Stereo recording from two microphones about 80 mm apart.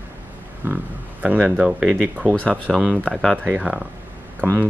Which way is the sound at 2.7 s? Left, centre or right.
Centre.